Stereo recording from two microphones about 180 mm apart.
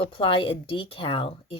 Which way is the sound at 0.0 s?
30° left (ahead or behind).